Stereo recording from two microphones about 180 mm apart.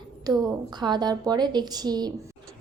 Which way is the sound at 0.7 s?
25° right (ahead or behind).